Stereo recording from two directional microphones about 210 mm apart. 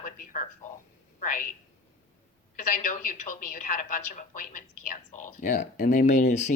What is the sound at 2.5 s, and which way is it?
A woman's voice, 40° left (ahead or behind).